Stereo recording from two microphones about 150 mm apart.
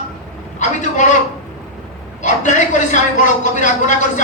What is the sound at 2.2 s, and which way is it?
A woman's voice, 55° left (ahead or behind).